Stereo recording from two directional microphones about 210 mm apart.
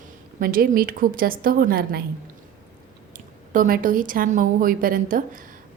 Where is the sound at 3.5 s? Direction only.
40° right (ahead or behind).